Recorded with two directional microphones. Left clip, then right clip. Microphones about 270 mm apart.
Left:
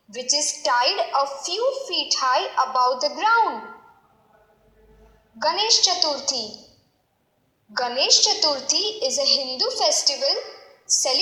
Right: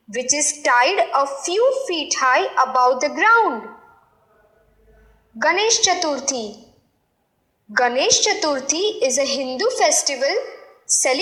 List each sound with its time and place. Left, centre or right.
0.1 s a woman's voice: right
5.4 s a woman's voice: right
7.7 s a woman's voice: right